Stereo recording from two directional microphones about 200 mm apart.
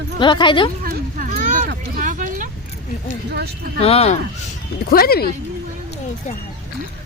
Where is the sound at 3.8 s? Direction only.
30° left (ahead or behind).